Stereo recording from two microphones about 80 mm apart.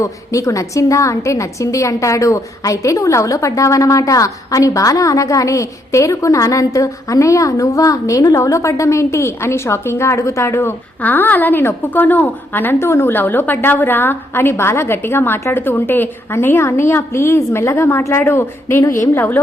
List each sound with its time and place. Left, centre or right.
0.0 s a woman's voice: left
11.0 s a woman's voice: left